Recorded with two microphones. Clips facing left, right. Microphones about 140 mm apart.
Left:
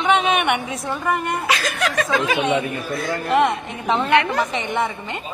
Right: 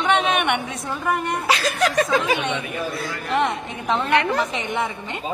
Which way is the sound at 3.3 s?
Centre (ahead or behind).